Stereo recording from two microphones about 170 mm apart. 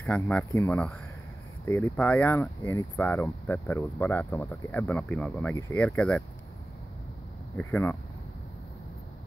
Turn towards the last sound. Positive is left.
turn(degrees=10)  # may be behind; listen again after turning